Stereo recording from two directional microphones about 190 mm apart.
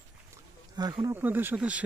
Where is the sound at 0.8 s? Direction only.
20° right (ahead or behind).